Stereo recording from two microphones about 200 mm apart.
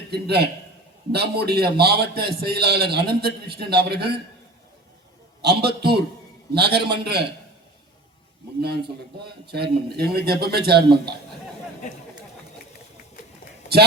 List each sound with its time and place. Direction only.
0.1 s a man's voice: 55° right (ahead or behind)
5.4 s a man's voice: 55° right (ahead or behind)
9.2 s a man's voice: 55° right (ahead or behind)